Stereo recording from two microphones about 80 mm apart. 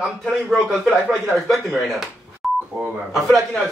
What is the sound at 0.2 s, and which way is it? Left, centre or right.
A man's voice, centre.